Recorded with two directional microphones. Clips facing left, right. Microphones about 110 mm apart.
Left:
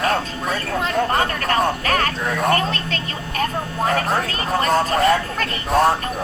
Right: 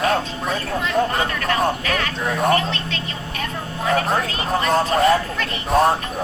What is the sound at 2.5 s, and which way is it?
Speech, 40° left (ahead or behind).